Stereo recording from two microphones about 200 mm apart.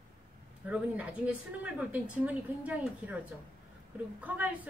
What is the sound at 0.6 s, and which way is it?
A woman's voice, 5° right (ahead or behind).